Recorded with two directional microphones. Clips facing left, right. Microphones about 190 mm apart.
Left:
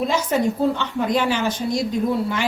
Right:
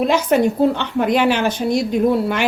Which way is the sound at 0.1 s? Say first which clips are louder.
Right 5 dB; 65° right (ahead or behind).